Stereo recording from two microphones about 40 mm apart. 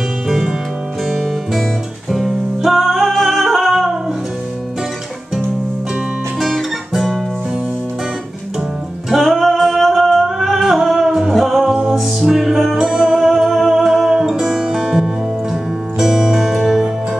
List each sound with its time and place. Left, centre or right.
0.3 s music: centre
1.0 s music: centre
6.4 s guitar: centre
9.1 s music: centre
11.6 s music: centre
12.0 s music: centre